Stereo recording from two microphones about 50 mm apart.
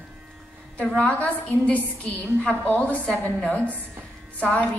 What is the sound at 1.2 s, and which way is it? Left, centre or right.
A woman's voice, left.